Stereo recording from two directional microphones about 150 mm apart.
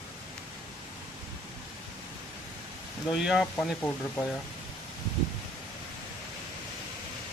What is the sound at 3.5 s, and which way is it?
Speech, 10° left (ahead or behind).